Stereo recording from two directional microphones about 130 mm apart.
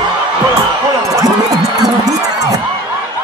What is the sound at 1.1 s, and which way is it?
Music, 25° right (ahead or behind).